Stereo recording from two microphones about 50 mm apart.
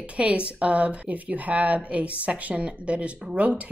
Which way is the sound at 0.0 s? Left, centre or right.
Right.